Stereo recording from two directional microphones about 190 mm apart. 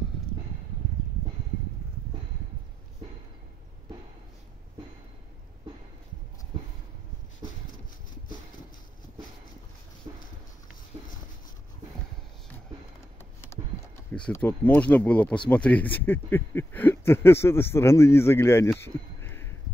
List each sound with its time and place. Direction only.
10.1 s dog: 20° right (ahead or behind)
14.1 s speech: 5° left (ahead or behind)
19.2 s a sound: 10° left (ahead or behind)